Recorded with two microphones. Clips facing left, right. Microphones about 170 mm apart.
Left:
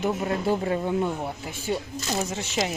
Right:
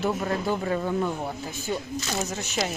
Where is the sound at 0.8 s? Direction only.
15° left (ahead or behind).